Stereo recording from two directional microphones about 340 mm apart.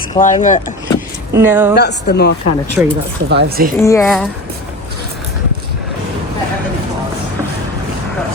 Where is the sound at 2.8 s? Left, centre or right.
Centre.